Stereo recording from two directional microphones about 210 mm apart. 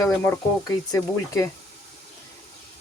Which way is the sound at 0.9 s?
15° left (ahead or behind).